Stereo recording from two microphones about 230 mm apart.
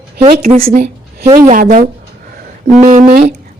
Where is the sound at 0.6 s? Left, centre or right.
Right.